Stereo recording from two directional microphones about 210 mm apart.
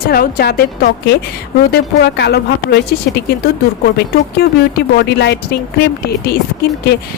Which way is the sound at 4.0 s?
50° left (ahead or behind).